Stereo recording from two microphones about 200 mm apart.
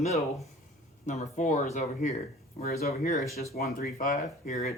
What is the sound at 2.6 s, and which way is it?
Speech, 50° left (ahead or behind).